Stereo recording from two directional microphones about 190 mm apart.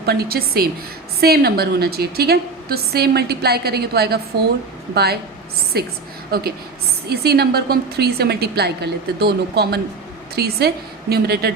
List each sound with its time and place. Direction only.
0.0 s a woman's voice: 55° right (ahead or behind)